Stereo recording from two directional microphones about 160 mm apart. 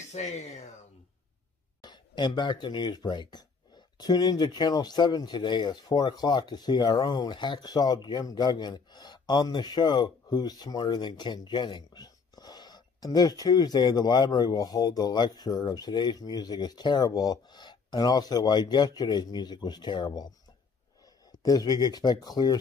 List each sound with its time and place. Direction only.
0.1 s speech: 45° left (ahead or behind)
1.8 s speech: 25° left (ahead or behind)
21.4 s speech: 25° left (ahead or behind)